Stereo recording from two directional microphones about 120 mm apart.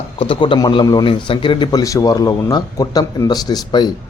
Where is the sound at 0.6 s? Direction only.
35° left (ahead or behind).